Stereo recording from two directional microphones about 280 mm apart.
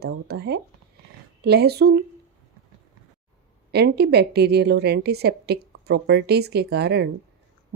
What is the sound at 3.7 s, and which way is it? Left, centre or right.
Speech, right.